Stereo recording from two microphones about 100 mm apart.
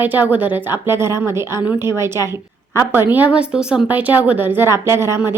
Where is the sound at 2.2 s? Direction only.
40° left (ahead or behind).